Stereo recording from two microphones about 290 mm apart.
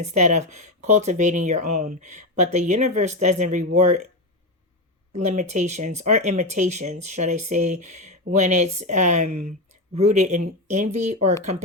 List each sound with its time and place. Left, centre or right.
0.0 s speech: right
5.1 s speech: right